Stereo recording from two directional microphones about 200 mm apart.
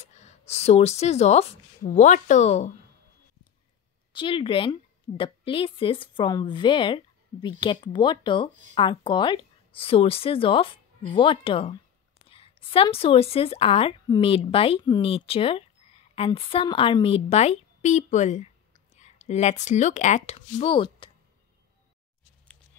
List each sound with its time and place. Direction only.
0.0 s speech: 35° left (ahead or behind)
4.1 s a woman's voice: 25° left (ahead or behind)